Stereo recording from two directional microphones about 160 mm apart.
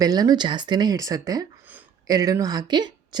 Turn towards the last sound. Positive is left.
turn(degrees=-25)  # may be behind; listen again after turning